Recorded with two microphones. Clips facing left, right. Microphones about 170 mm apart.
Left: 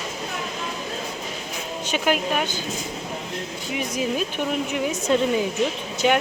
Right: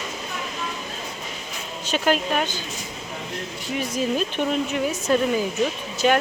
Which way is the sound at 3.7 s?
15° left (ahead or behind).